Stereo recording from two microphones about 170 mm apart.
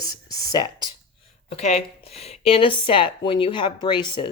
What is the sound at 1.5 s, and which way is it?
Speech, 40° left (ahead or behind).